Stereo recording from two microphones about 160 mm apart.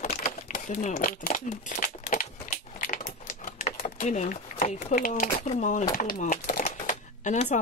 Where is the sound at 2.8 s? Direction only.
50° left (ahead or behind).